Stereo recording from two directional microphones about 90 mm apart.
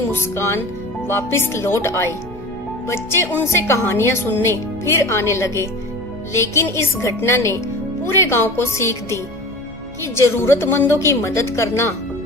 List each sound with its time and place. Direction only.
0.1 s a woman's voice: 30° left (ahead or behind)
10.2 s a woman's voice: 30° left (ahead or behind)